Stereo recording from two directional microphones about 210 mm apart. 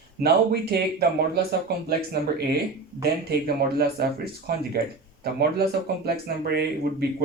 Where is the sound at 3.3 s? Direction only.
50° right (ahead or behind).